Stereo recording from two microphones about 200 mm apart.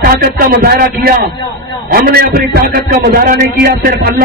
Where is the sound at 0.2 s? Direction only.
45° right (ahead or behind).